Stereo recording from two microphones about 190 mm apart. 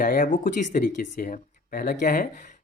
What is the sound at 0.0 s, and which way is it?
Speech, 45° left (ahead or behind).